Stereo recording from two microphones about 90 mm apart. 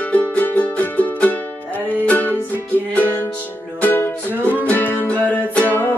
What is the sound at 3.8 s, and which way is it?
Music, 20° left (ahead or behind).